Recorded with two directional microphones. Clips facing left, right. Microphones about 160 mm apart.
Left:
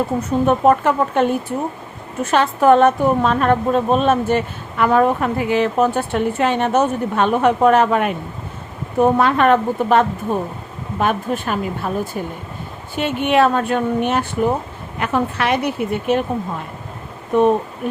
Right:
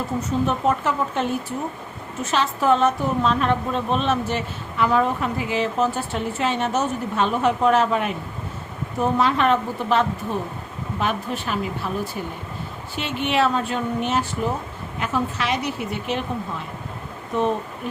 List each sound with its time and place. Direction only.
0.2 s a woman's voice: 55° left (ahead or behind)
13.0 s a woman's voice: 50° left (ahead or behind)
17.3 s a woman's voice: 55° left (ahead or behind)